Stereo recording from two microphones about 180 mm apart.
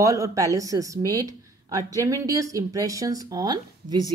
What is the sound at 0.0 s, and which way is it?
Speech, 20° right (ahead or behind).